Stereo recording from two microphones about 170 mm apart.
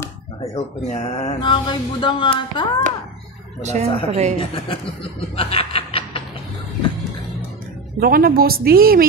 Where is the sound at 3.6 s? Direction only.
40° right (ahead or behind).